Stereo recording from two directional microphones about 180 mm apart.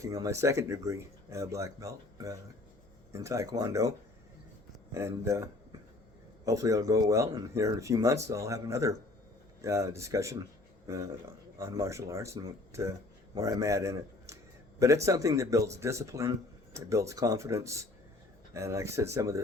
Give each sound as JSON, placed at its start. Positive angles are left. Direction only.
{"t": 0.0, "sound": "speech", "side_deg": -20}